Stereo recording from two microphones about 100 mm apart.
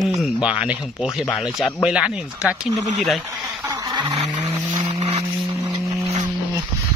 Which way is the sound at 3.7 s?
40° right (ahead or behind).